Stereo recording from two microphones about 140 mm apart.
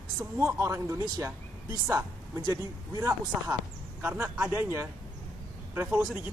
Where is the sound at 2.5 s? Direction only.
25° right (ahead or behind).